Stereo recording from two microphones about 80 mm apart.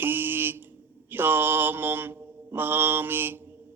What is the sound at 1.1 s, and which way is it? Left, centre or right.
Mantra, right.